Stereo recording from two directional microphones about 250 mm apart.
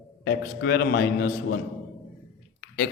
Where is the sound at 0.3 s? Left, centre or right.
Left.